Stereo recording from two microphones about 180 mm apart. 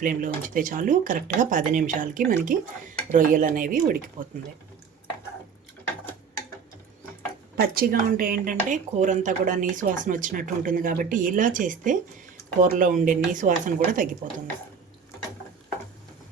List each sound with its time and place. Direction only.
0.0 s speech: 45° right (ahead or behind)
7.5 s speech: 55° right (ahead or behind)